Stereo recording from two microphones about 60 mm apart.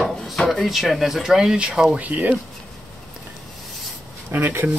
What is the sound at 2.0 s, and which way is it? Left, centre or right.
Speech, right.